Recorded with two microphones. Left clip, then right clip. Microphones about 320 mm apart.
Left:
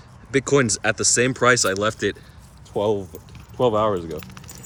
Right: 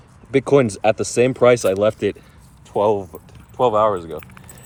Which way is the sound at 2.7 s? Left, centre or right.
Right.